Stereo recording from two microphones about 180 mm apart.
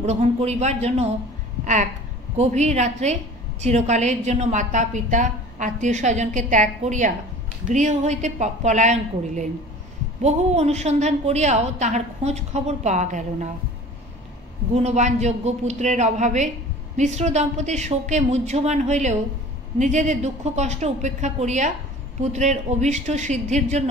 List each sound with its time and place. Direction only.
0.0 s a woman's voice: 35° right (ahead or behind)
2.3 s a woman's voice: 40° right (ahead or behind)
14.7 s a woman's voice: 35° right (ahead or behind)